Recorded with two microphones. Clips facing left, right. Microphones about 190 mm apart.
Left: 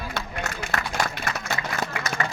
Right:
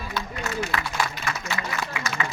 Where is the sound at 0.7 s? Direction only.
45° left (ahead or behind).